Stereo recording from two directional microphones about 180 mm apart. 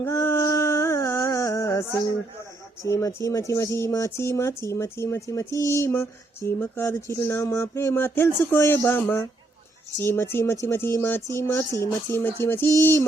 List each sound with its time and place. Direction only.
0.0 s music: 15° left (ahead or behind)
2.8 s speech: 15° left (ahead or behind)